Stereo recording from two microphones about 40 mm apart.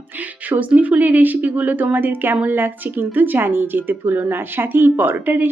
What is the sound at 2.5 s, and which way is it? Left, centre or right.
Speech, right.